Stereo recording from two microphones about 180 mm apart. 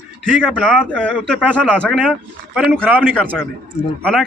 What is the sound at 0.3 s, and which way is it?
Speech, 5° right (ahead or behind).